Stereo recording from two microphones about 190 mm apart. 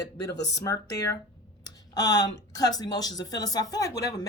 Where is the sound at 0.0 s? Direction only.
20° left (ahead or behind).